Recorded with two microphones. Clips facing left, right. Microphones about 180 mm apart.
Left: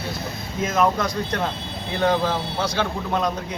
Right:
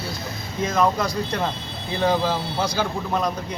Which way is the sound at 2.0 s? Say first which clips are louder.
Even; 5° right (ahead or behind).